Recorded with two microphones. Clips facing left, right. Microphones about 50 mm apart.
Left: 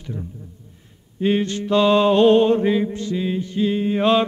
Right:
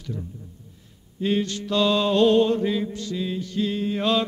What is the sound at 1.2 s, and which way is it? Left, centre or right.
Mantra, left.